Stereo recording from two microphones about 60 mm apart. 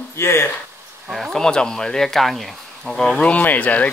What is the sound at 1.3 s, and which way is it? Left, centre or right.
Speech, centre.